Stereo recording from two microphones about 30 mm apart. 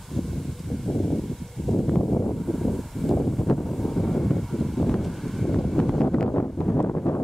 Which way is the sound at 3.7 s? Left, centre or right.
Centre.